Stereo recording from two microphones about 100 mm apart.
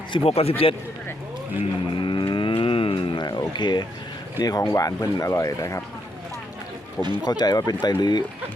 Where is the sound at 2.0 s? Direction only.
55° left (ahead or behind).